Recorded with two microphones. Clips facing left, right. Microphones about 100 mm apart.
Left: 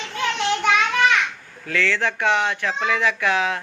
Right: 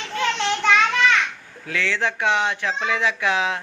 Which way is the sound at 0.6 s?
15° left (ahead or behind).